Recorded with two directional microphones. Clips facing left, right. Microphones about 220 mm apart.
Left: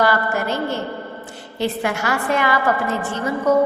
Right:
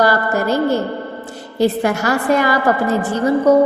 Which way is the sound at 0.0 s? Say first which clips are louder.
Right 4 dB; 40° right (ahead or behind).